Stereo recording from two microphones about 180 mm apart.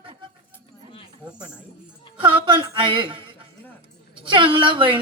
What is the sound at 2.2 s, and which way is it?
Speech, 30° right (ahead or behind).